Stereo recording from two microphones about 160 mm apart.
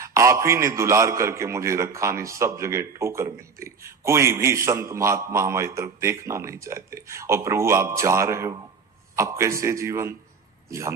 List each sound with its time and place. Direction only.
0.0 s a man's voice: 20° right (ahead or behind)